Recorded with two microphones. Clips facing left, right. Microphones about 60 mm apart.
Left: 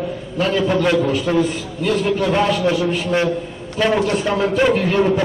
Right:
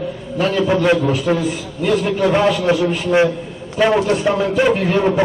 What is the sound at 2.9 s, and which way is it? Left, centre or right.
A man's voice, centre.